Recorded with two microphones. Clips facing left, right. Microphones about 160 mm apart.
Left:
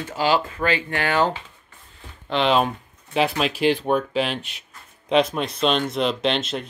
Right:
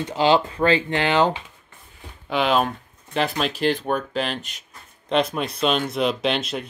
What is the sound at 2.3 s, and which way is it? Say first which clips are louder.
Speech: left 1 dB; 5° right (ahead or behind).